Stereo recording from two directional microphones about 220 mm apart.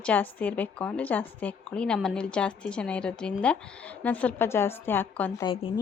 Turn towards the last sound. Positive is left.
turn(degrees=25)  # may be behind; listen again after turning